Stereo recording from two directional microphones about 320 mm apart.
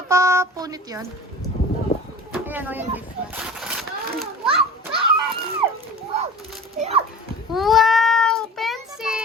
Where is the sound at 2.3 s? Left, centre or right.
Centre.